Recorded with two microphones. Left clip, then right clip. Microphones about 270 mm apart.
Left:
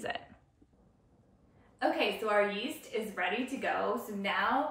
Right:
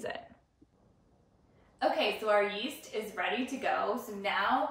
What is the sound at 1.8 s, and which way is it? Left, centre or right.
Speech, centre.